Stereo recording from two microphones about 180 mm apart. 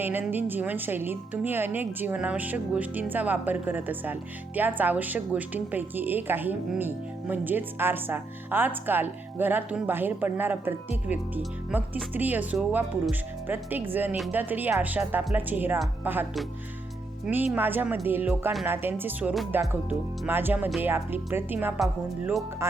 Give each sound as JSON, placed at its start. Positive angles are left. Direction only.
{"t": 0.0, "sound": "a woman's voice", "side_deg": -10}
{"t": 17.2, "sound": "a woman's voice", "side_deg": -10}